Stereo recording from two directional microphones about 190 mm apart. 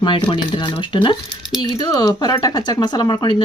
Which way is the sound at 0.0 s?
25° left (ahead or behind).